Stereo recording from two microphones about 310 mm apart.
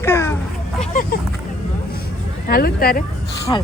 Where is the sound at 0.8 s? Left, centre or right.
Left.